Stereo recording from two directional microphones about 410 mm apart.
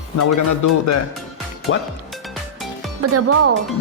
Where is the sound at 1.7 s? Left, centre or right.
Left.